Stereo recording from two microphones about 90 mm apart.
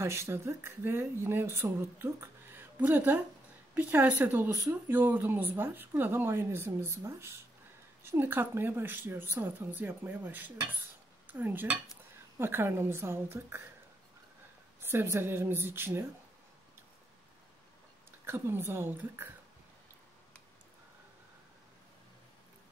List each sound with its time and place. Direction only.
0.0 s speech: 30° right (ahead or behind)
11.2 s dishes: 20° right (ahead or behind)
12.4 s speech: 25° right (ahead or behind)
14.8 s speech: 25° right (ahead or behind)
18.2 s speech: 25° right (ahead or behind)